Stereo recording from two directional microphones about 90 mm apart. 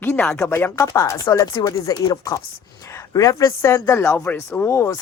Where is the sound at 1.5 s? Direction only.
55° left (ahead or behind).